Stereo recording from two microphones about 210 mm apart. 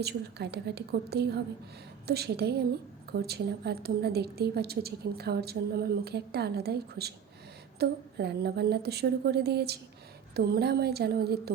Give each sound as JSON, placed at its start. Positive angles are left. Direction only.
{"t": 0.0, "sound": "a woman's voice", "side_deg": -50}